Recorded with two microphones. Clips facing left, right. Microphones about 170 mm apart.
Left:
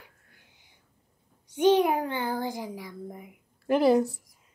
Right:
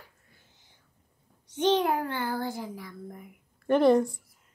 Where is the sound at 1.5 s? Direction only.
10° left (ahead or behind).